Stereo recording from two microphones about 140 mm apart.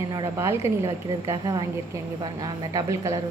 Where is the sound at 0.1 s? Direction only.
25° right (ahead or behind).